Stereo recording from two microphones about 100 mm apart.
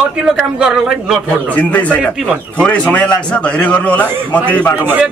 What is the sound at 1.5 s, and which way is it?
A man's voice, 15° left (ahead or behind).